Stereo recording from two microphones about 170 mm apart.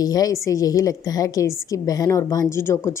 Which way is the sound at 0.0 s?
20° left (ahead or behind).